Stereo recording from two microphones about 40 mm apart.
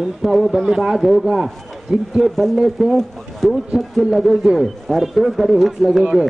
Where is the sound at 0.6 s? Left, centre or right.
Centre.